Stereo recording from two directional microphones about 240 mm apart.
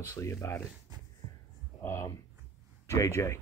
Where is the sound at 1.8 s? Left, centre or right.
Centre.